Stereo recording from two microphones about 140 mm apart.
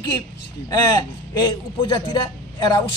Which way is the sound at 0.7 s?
25° left (ahead or behind).